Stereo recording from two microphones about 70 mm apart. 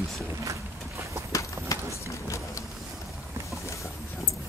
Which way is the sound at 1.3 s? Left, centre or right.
Left.